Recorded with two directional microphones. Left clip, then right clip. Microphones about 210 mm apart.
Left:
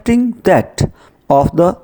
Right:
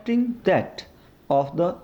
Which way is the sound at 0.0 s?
60° left (ahead or behind).